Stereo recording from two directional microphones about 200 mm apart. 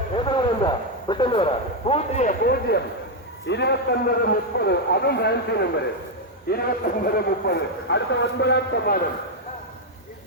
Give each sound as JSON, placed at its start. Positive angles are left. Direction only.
{"t": 0.2, "sound": "a man's voice", "side_deg": 25}